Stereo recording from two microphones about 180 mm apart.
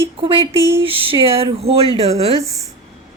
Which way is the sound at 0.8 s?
30° right (ahead or behind).